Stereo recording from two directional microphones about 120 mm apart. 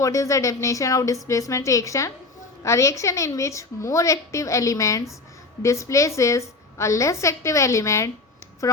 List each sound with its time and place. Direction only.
0.0 s a woman's voice: 25° left (ahead or behind)